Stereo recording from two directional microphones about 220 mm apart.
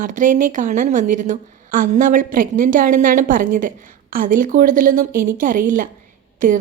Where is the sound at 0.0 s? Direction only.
35° right (ahead or behind).